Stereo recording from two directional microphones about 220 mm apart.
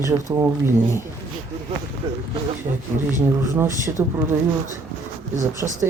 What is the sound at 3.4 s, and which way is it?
Speech, 10° right (ahead or behind).